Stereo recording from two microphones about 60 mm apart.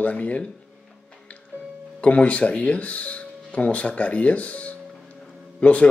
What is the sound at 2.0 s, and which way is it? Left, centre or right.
Speech, left.